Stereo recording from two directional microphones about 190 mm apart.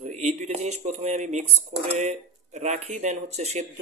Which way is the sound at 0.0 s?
35° right (ahead or behind).